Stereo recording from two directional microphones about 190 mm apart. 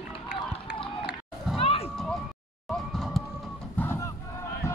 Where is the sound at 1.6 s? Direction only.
30° left (ahead or behind).